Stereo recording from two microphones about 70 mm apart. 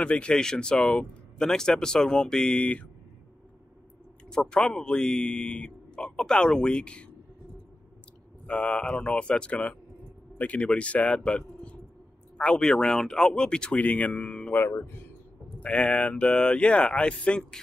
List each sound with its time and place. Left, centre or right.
0.0 s a man's voice: centre
4.3 s a man's voice: centre
8.5 s a man's voice: centre
14.6 s speech: left
15.6 s a man's voice: centre